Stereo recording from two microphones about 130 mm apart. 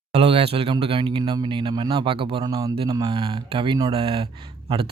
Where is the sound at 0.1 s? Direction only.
50° right (ahead or behind).